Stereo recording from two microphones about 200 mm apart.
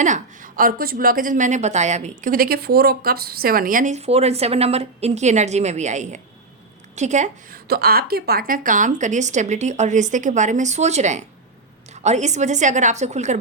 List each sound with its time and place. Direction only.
0.0 s a woman's voice: 40° right (ahead or behind)
7.7 s a woman's voice: 50° right (ahead or behind)